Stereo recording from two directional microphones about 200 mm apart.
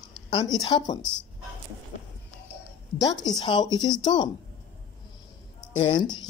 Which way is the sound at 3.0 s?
20° left (ahead or behind).